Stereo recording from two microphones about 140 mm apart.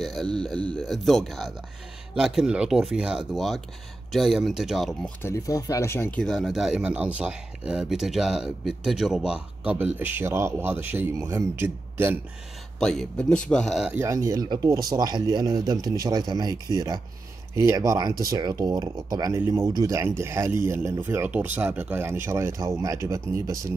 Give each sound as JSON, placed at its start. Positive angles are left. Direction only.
{"t": 0.0, "sound": "speech", "side_deg": 5}
{"t": 5.2, "sound": "speech", "side_deg": 25}
{"t": 12.7, "sound": "speech", "side_deg": 5}
{"t": 13.9, "sound": "speech", "side_deg": -20}